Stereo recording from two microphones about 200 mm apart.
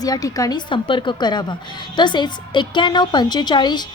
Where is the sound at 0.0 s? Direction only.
20° left (ahead or behind).